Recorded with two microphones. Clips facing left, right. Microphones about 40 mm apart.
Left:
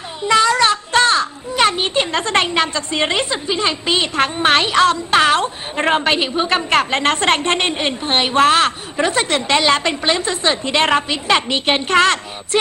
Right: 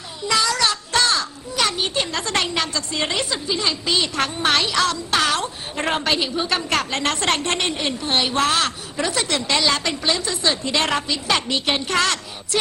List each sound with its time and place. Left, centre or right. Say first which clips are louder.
0.2 s a child's voice: left 6 dB; left